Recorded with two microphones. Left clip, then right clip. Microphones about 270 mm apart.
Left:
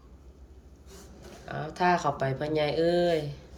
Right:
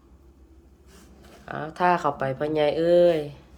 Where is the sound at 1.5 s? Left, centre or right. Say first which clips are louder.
Right 3 dB; centre.